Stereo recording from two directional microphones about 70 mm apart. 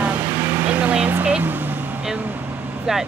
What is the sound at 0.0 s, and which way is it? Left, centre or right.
Vehicle, right.